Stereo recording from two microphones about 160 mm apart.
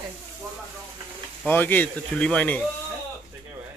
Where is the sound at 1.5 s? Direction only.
10° left (ahead or behind).